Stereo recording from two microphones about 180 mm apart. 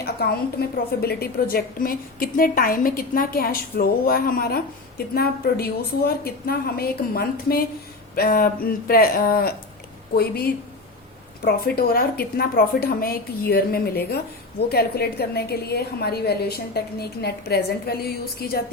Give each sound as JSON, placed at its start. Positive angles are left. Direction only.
{"t": 0.0, "sound": "a woman's voice", "side_deg": 60}